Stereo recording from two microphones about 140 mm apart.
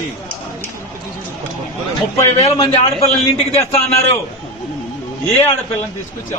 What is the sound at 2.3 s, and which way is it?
Speech, 50° left (ahead or behind).